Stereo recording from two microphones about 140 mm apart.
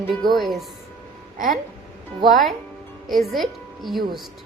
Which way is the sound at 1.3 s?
70° right (ahead or behind).